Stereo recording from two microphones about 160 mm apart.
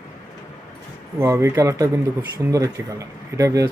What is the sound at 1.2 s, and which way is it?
Speech, 15° right (ahead or behind).